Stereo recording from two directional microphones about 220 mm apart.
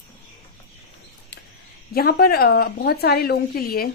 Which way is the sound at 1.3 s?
50° left (ahead or behind).